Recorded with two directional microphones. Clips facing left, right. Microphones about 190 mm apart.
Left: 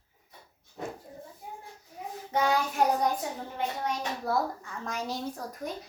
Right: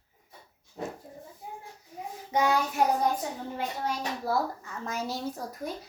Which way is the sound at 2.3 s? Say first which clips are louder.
Right 1 dB; 10° right (ahead or behind).